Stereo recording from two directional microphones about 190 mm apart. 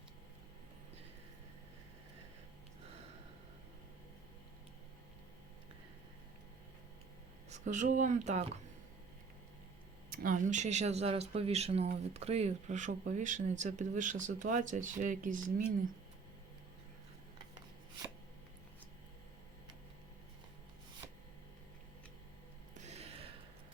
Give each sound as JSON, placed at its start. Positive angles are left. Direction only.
{"t": 7.5, "sound": "speech", "side_deg": -40}
{"t": 10.1, "sound": "speech", "side_deg": -45}
{"t": 22.8, "sound": "a sound", "side_deg": -35}